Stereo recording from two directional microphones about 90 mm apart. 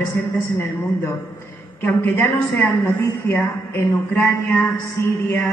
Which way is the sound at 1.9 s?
25° left (ahead or behind).